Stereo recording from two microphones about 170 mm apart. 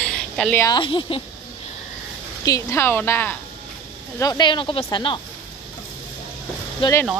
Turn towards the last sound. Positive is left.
turn(degrees=30)  # may be behind; listen again after turning